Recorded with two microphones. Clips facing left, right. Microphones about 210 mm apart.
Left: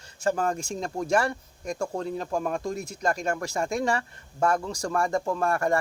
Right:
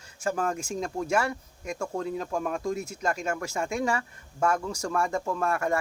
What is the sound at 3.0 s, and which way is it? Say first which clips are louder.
Speech: left 2 dB; 35° left (ahead or behind).